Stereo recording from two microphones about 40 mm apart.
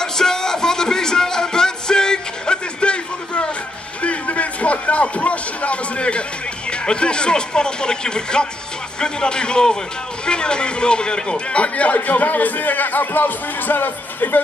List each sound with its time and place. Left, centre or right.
0.0 s music: centre
4.0 s a sound: left
6.7 s a man's voice: left